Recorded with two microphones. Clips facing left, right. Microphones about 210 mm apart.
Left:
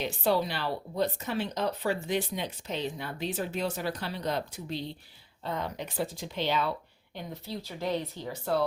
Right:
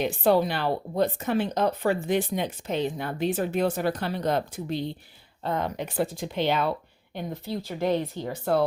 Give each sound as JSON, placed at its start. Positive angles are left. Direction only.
{"t": 0.0, "sound": "speech", "side_deg": -55}